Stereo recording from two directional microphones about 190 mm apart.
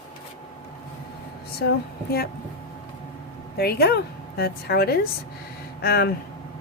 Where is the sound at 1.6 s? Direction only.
55° left (ahead or behind).